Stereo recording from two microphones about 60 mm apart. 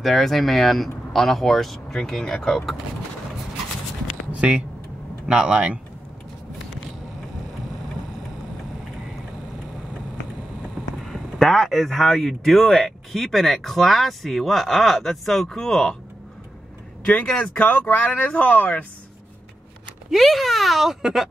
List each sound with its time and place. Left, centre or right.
0.0 s speech: centre
4.3 s speech: centre
11.1 s speech: centre
17.0 s speech: centre
20.1 s speech: centre